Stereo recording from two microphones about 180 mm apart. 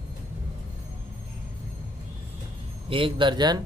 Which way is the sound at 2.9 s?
30° right (ahead or behind).